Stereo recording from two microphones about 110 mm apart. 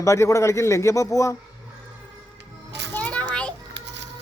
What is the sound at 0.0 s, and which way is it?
A man's voice, 30° left (ahead or behind).